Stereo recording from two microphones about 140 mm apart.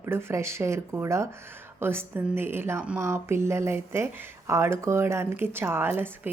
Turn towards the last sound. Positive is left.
turn(degrees=-15)  # may be behind; listen again after turning